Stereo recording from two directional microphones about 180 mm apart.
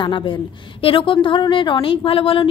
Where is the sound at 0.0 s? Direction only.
25° left (ahead or behind).